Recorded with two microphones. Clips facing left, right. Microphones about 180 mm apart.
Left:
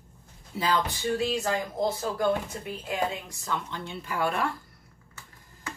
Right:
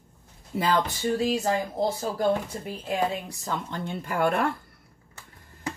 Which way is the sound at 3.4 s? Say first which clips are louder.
Right 1 dB; 45° right (ahead or behind).